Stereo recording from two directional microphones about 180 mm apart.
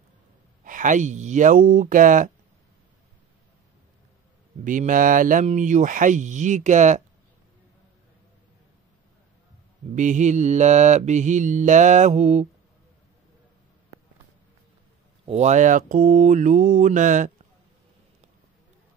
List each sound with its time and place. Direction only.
0.7 s speech: 45° right (ahead or behind)
4.6 s speech: 45° right (ahead or behind)
9.9 s mantra: 40° right (ahead or behind)
15.2 s speech: 40° right (ahead or behind)